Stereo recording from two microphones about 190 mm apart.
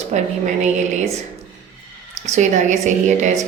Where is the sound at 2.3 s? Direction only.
40° right (ahead or behind).